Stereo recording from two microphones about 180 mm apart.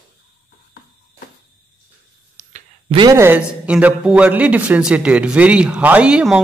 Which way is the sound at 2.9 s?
25° right (ahead or behind).